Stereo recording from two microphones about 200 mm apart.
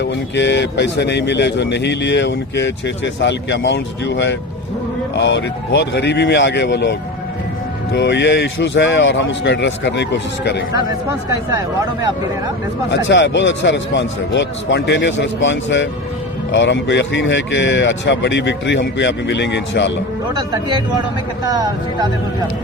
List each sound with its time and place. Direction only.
0.0 s speech: 60° left (ahead or behind)
7.9 s speech: 60° left (ahead or behind)
11.3 s speech: 15° right (ahead or behind)
12.9 s speech: 65° left (ahead or behind)
20.3 s speech: 20° right (ahead or behind)